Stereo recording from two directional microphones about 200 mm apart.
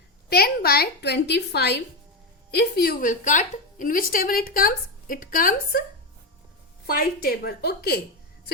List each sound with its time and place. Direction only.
0.3 s a woman's voice: 50° left (ahead or behind)
6.8 s a woman's voice: 45° left (ahead or behind)